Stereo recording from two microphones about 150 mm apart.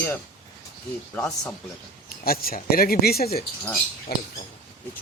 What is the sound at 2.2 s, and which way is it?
Speech, 85° left.